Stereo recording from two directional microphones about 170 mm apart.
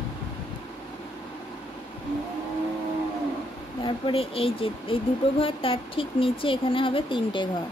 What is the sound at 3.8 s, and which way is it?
Speech, 35° left (ahead or behind).